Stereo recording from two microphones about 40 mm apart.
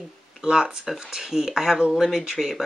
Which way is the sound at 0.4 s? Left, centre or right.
Centre.